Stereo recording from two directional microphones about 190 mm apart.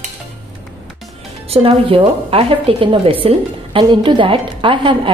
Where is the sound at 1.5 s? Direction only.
30° right (ahead or behind).